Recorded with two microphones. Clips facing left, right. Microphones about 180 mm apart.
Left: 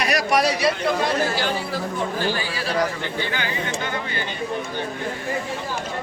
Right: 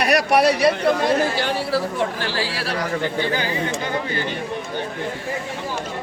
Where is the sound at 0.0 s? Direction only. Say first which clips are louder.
Right 4 dB; 60° right (ahead or behind).